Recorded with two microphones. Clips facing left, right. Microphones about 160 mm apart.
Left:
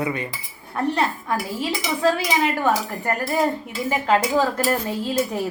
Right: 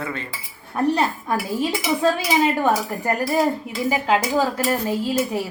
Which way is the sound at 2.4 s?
15° right (ahead or behind).